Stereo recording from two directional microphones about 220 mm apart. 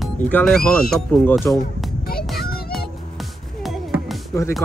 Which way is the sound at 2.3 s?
45° left (ahead or behind).